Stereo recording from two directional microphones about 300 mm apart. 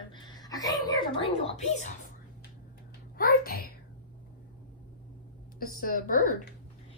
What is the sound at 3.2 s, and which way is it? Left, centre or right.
Speech, left.